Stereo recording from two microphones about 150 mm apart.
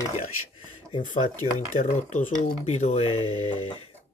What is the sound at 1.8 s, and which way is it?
Speech, 55° left (ahead or behind).